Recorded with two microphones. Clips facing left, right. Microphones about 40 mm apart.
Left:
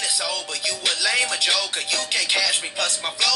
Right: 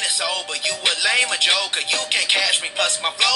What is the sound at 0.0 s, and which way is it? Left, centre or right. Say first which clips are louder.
Music: right 3 dB; right.